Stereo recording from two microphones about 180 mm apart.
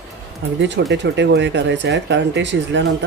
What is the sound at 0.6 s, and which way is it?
Speech, 80° right.